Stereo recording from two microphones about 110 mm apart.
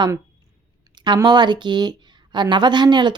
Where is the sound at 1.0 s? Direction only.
45° right (ahead or behind).